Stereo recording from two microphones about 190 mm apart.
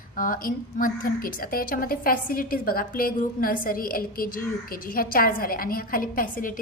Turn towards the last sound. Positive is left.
turn(degrees=45)  # may be behind; listen again after turning